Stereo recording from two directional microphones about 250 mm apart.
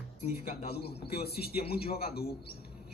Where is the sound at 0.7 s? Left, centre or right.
Left.